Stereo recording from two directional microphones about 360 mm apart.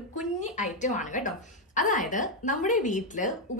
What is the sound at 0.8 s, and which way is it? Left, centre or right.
A woman's voice, left.